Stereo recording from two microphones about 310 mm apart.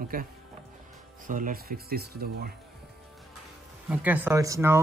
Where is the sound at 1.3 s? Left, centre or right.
Right.